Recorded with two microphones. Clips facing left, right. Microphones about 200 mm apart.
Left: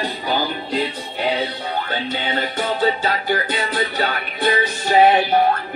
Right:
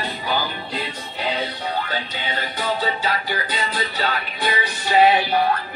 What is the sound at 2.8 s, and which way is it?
Music, 50° left (ahead or behind).